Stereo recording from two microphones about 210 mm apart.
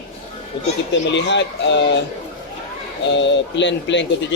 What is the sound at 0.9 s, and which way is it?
Speech, 60° left (ahead or behind).